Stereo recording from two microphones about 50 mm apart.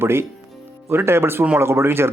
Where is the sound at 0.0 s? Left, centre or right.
Right.